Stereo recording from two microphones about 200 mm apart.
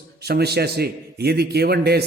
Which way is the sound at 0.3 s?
55° right (ahead or behind).